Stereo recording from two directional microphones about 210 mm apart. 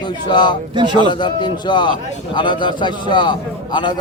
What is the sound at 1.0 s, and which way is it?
A man's voice, 20° left (ahead or behind).